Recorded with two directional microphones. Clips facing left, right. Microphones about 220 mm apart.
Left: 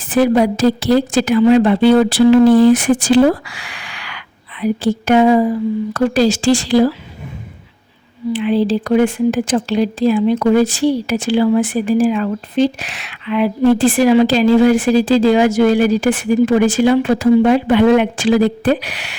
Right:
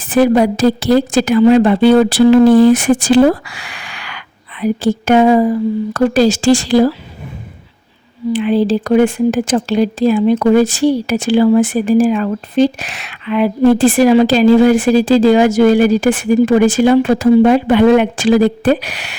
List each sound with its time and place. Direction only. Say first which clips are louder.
0.1 s speech: right 2 dB; 45° right (ahead or behind)
8.3 s speech: right 2 dB; 45° right (ahead or behind)